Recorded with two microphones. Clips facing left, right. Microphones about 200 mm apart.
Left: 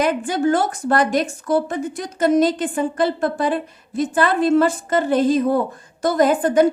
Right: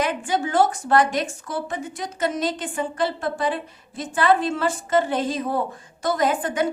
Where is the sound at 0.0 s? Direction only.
40° left (ahead or behind).